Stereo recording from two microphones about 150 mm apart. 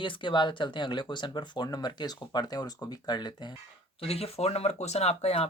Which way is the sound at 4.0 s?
40° left (ahead or behind).